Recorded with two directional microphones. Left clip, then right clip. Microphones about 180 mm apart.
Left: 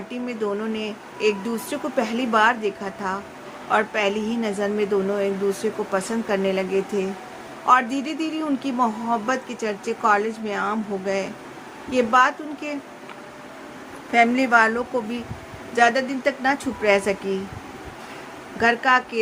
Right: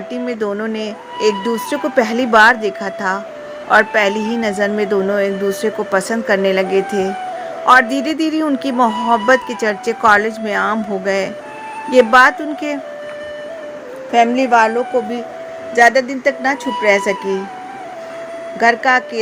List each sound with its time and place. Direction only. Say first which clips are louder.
0.1 s a woman's voice: right 6 dB; 35° right (ahead or behind)
14.1 s a woman's voice: right 5 dB; 15° right (ahead or behind)
18.6 s speech: right 6 dB; 25° right (ahead or behind)